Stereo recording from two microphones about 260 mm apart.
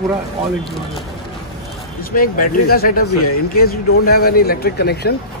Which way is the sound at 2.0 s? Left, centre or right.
Left.